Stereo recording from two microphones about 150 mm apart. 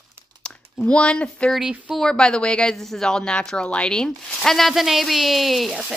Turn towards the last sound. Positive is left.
turn(degrees=0)  # may be behind; listen again after turning